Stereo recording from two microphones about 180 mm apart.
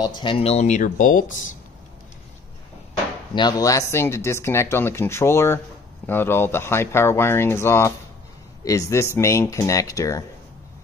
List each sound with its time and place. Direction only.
0.0 s speech: 25° left (ahead or behind); by 1.2 s 45° left (ahead or behind)
3.3 s speech: 20° left (ahead or behind)